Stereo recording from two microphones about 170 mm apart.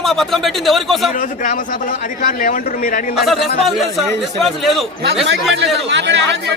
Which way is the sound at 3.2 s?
Centre (ahead or behind).